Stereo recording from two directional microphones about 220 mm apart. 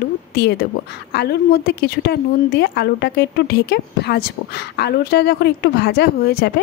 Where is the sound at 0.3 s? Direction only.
45° left (ahead or behind).